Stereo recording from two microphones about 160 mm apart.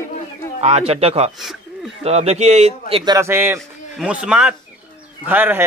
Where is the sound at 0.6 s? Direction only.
40° right (ahead or behind).